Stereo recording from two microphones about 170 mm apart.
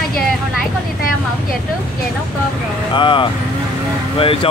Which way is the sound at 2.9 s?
30° left (ahead or behind).